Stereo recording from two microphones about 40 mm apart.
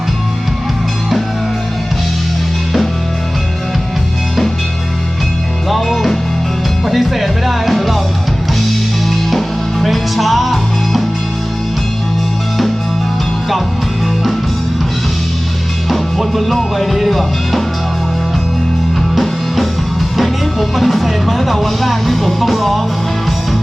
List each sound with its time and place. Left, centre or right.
5.6 s music: centre
9.8 s music: centre
15.9 s music: centre
19.1 s music: centre